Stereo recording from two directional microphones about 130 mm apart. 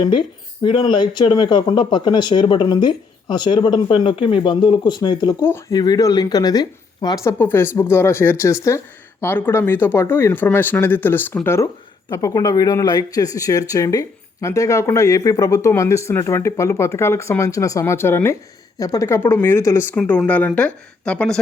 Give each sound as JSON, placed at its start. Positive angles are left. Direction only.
{"t": 0.0, "sound": "speech", "side_deg": 40}
{"t": 7.3, "sound": "speech", "side_deg": 15}
{"t": 20.0, "sound": "speech", "side_deg": 10}